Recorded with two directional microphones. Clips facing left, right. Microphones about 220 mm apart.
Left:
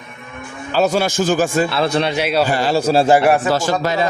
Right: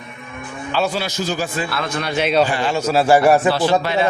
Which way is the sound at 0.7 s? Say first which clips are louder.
Left 5 dB; 40° left (ahead or behind).